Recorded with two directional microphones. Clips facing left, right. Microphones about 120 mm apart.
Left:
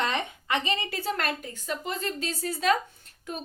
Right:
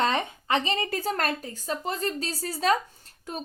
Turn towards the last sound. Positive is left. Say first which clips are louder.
# even
turn(degrees=-35)  # may be behind; listen again after turning